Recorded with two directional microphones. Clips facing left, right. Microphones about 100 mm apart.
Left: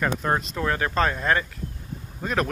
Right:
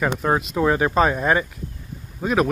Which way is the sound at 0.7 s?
15° right (ahead or behind).